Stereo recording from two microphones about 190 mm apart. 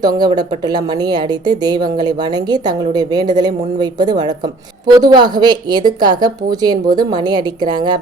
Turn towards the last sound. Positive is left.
turn(degrees=-20)  # may be behind; listen again after turning